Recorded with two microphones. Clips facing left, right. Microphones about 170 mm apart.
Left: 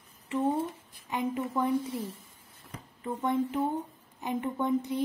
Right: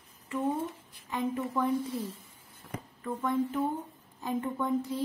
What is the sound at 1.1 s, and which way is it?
Speech, 20° left (ahead or behind).